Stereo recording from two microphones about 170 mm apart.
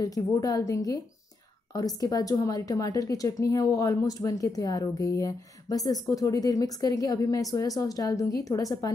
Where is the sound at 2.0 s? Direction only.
20° left (ahead or behind).